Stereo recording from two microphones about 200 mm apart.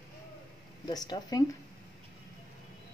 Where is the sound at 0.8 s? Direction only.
20° left (ahead or behind).